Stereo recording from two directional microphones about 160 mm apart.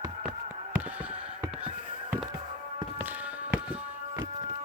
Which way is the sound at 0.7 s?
10° right (ahead or behind).